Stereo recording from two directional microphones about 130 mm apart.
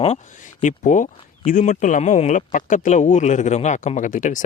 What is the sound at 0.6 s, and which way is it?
Speech, 85° left.